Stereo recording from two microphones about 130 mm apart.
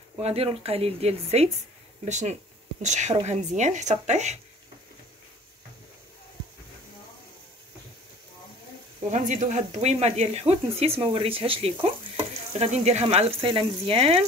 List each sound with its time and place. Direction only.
0.2 s speech: 50° right (ahead or behind)
9.1 s speech: 75° right (ahead or behind); by 11.7 s 45° right (ahead or behind)
12.5 s speech: 60° right (ahead or behind)
13.0 s speech: 50° right (ahead or behind)